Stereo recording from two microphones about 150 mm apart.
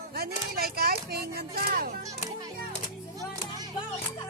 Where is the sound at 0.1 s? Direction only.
90° right.